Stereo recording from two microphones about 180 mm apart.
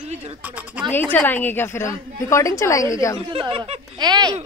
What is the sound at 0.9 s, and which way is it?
Speech, 10° left (ahead or behind).